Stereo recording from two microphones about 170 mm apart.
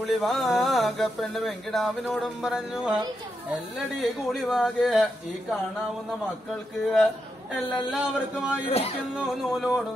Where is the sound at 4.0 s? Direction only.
Centre (ahead or behind).